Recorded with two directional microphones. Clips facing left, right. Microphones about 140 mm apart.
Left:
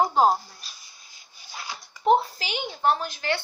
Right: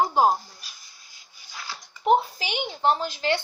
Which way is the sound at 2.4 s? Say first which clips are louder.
Right 1 dB; 20° right (ahead or behind).